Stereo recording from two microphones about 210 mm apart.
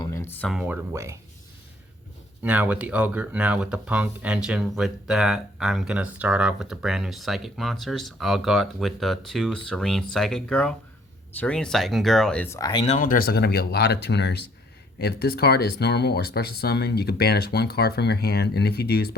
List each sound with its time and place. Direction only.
0.0 s speech: 15° left (ahead or behind); by 1.2 s 15° right (ahead or behind)
2.4 s speech: 5° right (ahead or behind); by 12.8 s 15° left (ahead or behind)
12.8 s speech: 35° left (ahead or behind)